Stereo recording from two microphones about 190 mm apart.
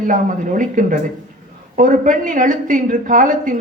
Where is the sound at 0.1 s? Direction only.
45° right (ahead or behind).